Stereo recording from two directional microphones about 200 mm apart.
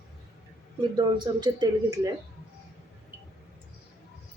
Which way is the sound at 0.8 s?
20° right (ahead or behind).